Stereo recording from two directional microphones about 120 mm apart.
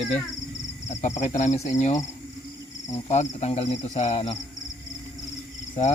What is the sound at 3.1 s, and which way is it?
Speech, 65° left (ahead or behind).